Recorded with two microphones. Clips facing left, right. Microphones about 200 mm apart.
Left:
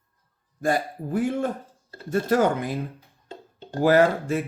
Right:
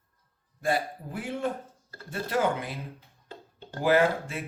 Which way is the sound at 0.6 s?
45° left (ahead or behind).